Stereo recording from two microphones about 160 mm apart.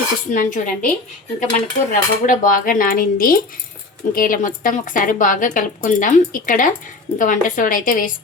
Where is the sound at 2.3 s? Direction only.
55° left (ahead or behind).